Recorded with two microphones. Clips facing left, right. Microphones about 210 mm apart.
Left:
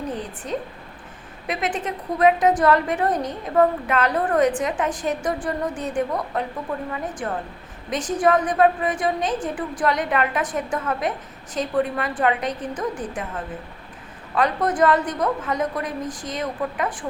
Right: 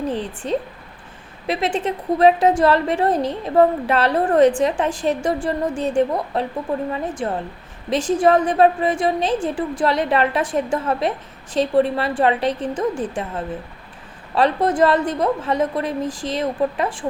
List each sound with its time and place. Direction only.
0.4 s a woman's voice: 30° right (ahead or behind)